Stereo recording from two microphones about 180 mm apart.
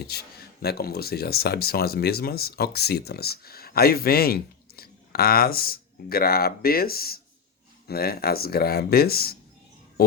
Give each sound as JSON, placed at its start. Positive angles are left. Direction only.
{"t": 0.0, "sound": "speech", "side_deg": 60}